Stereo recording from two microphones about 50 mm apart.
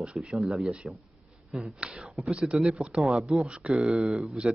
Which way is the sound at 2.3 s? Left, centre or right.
Centre.